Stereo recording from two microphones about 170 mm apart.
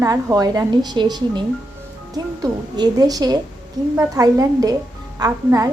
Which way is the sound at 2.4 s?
25° right (ahead or behind).